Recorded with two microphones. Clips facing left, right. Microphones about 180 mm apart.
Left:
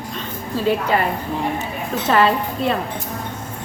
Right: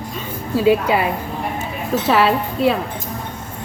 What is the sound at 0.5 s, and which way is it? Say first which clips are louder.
Speech: right 4 dB; 10° right (ahead or behind).